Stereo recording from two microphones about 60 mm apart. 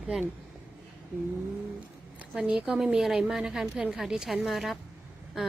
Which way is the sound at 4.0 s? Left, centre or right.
Centre.